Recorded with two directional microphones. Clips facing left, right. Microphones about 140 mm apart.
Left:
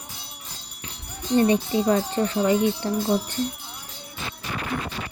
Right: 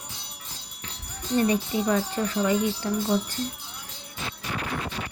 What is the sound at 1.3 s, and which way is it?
Speech, 25° left (ahead or behind).